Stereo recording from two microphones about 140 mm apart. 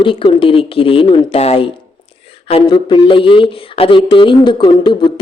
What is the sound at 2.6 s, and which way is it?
Speech, 35° left (ahead or behind).